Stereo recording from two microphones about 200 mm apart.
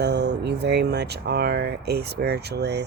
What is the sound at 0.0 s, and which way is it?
Speech, 55° right (ahead or behind).